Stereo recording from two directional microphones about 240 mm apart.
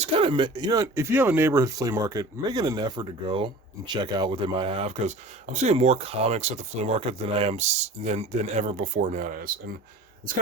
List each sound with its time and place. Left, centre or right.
0.0 s speech: right